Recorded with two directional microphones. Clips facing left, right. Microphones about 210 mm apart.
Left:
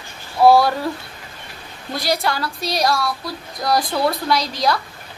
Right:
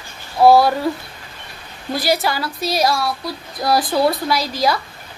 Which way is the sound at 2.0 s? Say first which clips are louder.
Right 2 dB; 5° right (ahead or behind).